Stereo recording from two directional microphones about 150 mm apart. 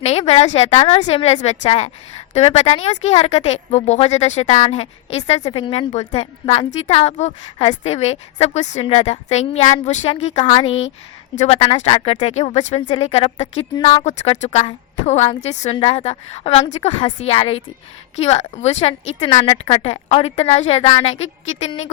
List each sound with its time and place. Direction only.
0.0 s a woman's voice: 45° left (ahead or behind)
11.3 s a woman's voice: 45° left (ahead or behind)
12.8 s a woman's voice: 35° left (ahead or behind)